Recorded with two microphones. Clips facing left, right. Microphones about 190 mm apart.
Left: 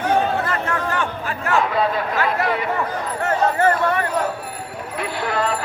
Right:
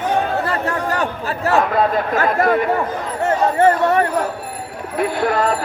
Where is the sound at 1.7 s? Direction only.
50° right (ahead or behind).